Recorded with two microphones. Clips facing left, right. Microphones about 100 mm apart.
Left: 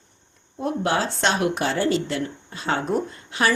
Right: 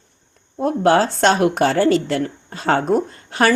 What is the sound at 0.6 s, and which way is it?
Speech, 45° right (ahead or behind).